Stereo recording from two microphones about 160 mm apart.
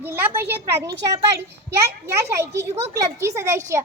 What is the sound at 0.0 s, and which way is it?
Speech, 15° right (ahead or behind).